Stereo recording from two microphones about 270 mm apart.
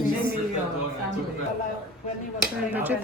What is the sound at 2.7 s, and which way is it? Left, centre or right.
Speech, centre.